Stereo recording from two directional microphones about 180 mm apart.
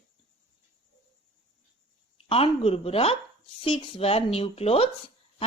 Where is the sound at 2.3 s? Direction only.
35° left (ahead or behind).